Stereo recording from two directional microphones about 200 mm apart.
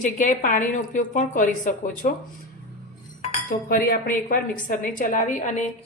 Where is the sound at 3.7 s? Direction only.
45° left (ahead or behind).